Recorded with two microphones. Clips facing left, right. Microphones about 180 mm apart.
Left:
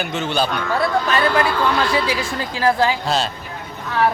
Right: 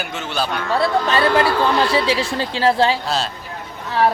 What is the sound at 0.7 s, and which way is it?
A man's voice, 25° right (ahead or behind).